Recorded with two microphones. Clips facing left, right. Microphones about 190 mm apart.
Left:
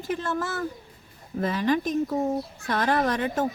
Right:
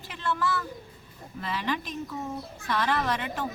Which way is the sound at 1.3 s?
45° left (ahead or behind).